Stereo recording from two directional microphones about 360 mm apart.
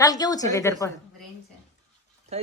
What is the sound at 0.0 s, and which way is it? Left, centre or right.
Speech, centre.